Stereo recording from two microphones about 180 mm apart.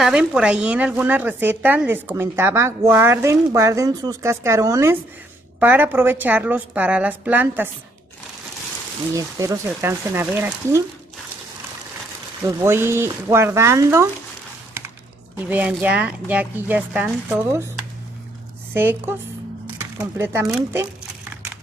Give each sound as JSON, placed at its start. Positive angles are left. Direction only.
{"t": 0.0, "sound": "speech", "side_deg": -5}
{"t": 9.1, "sound": "speech", "side_deg": -15}
{"t": 12.4, "sound": "speech", "side_deg": -15}
{"t": 15.3, "sound": "a woman's voice", "side_deg": -10}